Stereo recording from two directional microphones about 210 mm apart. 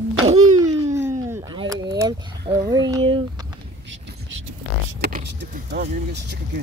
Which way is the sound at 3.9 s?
65° right (ahead or behind).